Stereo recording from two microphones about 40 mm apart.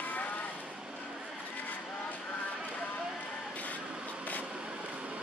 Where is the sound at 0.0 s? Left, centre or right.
Left.